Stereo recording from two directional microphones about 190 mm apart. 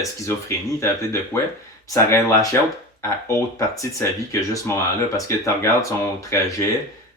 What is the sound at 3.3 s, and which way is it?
Speech, 15° left (ahead or behind).